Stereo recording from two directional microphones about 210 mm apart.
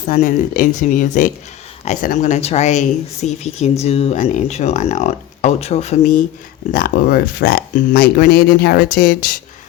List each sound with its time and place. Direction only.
0.1 s speech: 40° left (ahead or behind)